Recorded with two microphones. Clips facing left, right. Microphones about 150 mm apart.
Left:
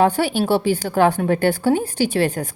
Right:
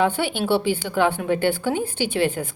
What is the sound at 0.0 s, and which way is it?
A woman's voice, 40° left (ahead or behind).